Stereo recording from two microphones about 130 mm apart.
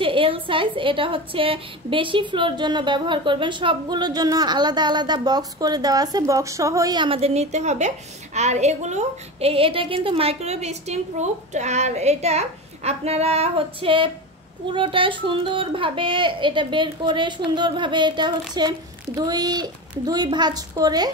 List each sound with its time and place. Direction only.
0.0 s a woman's voice: 45° right (ahead or behind)
7.1 s a woman's voice: 50° right (ahead or behind); by 21.1 s 30° right (ahead or behind)